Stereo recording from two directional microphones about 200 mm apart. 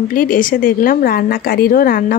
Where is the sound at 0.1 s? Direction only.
45° left (ahead or behind).